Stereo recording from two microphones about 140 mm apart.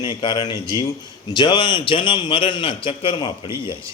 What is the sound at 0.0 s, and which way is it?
A man's voice, 35° left (ahead or behind).